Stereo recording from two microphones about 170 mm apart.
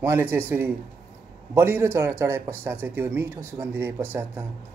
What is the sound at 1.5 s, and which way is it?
A man's voice, 15° right (ahead or behind).